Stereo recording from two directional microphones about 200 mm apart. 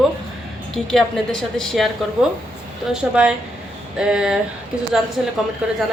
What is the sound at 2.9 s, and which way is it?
A woman's voice, 5° right (ahead or behind).